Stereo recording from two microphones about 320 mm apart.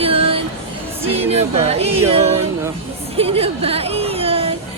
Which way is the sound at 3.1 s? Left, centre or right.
Centre.